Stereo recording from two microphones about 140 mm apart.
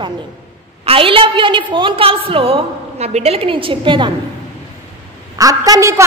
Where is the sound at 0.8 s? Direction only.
40° right (ahead or behind).